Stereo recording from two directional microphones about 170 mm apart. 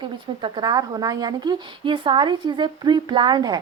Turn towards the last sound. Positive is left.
turn(degrees=-25)  # may be behind; listen again after turning